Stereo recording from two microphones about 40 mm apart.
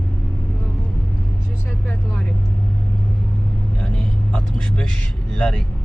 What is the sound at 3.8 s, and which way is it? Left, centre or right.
Speech, left.